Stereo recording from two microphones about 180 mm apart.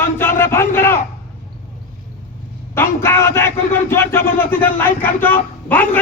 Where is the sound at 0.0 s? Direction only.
15° left (ahead or behind).